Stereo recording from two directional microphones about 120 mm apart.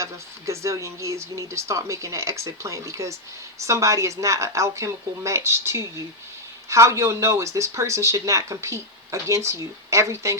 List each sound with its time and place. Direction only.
0.0 s speech: 25° right (ahead or behind)